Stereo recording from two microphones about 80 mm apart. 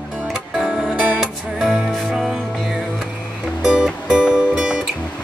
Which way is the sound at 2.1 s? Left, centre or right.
Centre.